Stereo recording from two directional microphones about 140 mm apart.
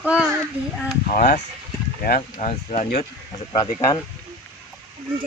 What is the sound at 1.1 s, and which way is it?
Speech, 75° left (ahead or behind).